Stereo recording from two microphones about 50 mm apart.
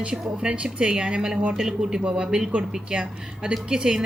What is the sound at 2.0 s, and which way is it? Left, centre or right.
Speech, centre.